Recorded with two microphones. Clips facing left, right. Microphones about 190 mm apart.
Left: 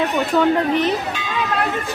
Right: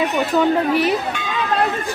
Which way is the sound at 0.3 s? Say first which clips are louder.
Even; 10° right (ahead or behind).